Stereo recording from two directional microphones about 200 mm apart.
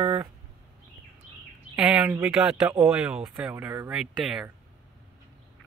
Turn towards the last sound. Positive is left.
turn(degrees=0)  # may be behind; listen again after turning